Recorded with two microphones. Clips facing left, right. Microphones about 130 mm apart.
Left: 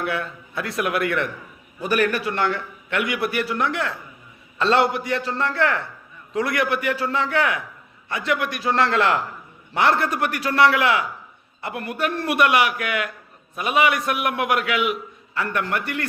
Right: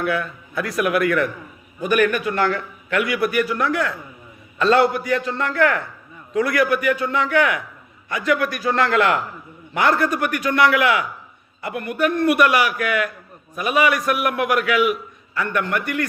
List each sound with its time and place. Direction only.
0.0 s a man's voice: 25° left (ahead or behind)